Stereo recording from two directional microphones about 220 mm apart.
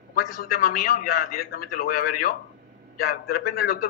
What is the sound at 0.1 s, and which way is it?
A man's voice, 40° left (ahead or behind).